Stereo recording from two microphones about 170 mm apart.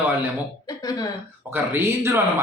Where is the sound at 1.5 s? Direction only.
15° right (ahead or behind).